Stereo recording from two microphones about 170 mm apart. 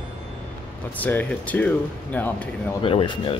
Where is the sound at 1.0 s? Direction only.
10° left (ahead or behind).